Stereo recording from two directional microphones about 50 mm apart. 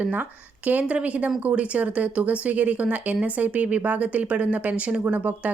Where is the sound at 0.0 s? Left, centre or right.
Right.